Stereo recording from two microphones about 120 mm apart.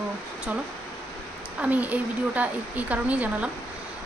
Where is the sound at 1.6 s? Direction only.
15° right (ahead or behind).